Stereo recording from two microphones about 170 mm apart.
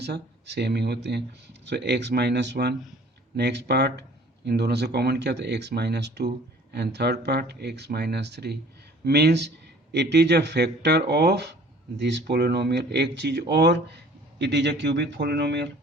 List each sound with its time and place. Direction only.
0.0 s speech: 80° right
11.9 s speech: 90° right